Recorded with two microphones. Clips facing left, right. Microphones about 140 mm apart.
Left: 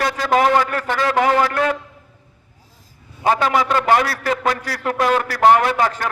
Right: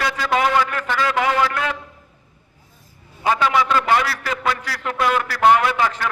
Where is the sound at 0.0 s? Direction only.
45° left (ahead or behind).